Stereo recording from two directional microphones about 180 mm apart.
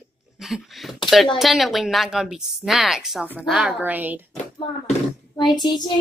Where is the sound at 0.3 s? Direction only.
Centre (ahead or behind).